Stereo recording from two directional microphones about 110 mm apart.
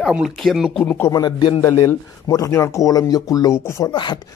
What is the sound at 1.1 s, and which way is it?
Speech, 40° left (ahead or behind).